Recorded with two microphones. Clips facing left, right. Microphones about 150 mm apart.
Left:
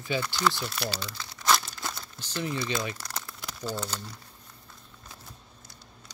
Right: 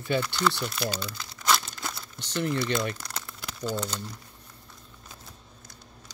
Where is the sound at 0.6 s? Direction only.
45° right (ahead or behind).